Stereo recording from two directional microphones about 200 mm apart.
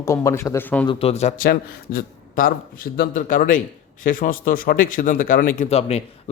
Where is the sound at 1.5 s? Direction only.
45° left (ahead or behind).